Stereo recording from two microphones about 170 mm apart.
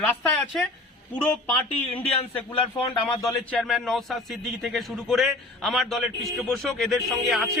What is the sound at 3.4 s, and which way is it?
A man's voice, 5° left (ahead or behind).